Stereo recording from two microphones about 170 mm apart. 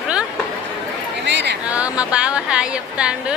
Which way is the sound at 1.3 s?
90° right.